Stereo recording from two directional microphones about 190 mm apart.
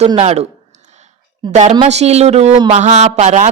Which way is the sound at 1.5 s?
35° right (ahead or behind).